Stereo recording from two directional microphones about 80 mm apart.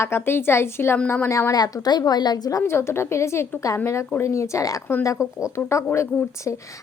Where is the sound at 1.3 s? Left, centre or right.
Left.